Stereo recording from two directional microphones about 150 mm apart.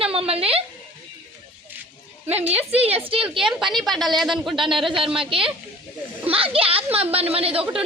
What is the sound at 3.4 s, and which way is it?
A woman's voice, 5° right (ahead or behind).